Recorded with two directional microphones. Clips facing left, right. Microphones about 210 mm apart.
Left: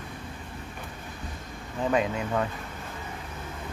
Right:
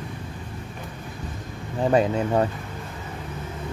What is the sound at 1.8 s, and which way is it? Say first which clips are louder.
Speech: right 6 dB; 35° right (ahead or behind).